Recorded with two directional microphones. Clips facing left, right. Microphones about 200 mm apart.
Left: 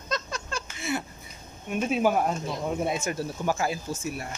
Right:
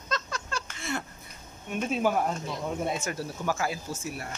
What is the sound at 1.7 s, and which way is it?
Speech, 10° left (ahead or behind).